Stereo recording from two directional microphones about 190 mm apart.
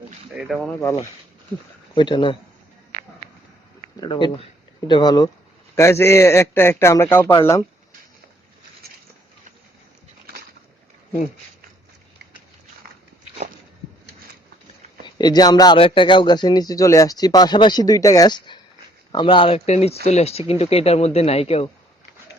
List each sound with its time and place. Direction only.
0.3 s speech: centre (ahead or behind)
2.0 s speech: 25° left (ahead or behind)
4.0 s a man's voice: 25° left (ahead or behind)
15.0 s speech: 20° left (ahead or behind)